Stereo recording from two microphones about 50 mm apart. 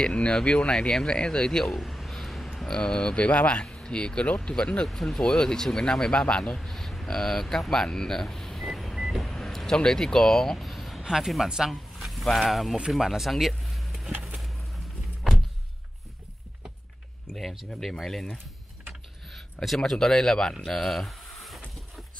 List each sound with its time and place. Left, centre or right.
0.0 s speech: centre
1.7 s speech: centre; by 4.8 s left
4.8 s speech: centre
8.6 s vehicle: centre
9.8 s speech: centre
11.7 s a sound: centre
12.4 s speech: centre
13.3 s vehicle: centre
14.2 s a sound: centre
17.7 s speech: centre
19.3 s a sound: centre
19.8 s speech: centre